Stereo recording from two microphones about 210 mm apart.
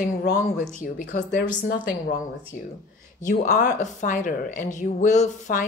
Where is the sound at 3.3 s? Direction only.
40° left (ahead or behind).